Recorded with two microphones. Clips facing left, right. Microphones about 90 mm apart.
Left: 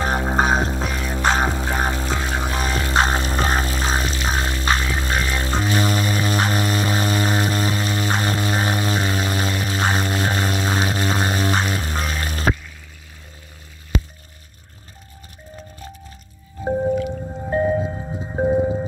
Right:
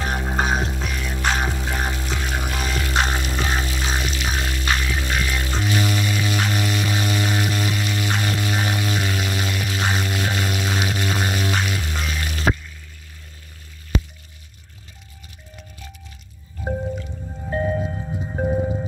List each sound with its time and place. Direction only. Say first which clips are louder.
0.0 s music: left 4 dB; 30° left (ahead or behind)
17.3 s music: left 3 dB; 25° left (ahead or behind)